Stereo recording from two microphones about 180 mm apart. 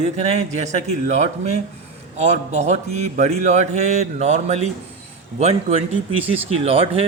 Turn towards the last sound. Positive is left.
turn(degrees=-35)  # may be behind; listen again after turning